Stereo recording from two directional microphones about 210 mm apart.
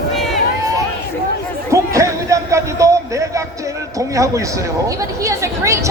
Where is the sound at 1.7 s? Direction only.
15° right (ahead or behind).